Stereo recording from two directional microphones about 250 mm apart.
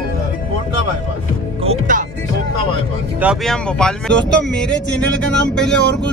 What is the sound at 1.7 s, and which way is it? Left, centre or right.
Music, right.